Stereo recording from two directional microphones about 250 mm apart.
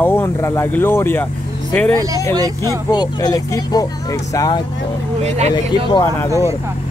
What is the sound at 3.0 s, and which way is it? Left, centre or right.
Speech, centre.